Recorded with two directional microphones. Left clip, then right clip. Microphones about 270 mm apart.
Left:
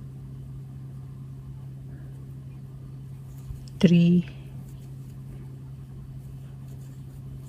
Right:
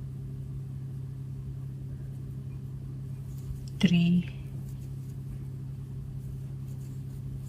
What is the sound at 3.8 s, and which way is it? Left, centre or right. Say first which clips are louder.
Speech: left 6 dB; left.